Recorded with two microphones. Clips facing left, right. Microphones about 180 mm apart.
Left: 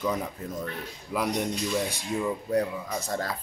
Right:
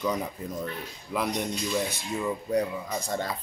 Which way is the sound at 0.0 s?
Centre (ahead or behind).